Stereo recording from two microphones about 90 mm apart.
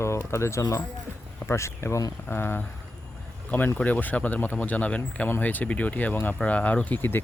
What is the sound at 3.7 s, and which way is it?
Speech, 20° left (ahead or behind).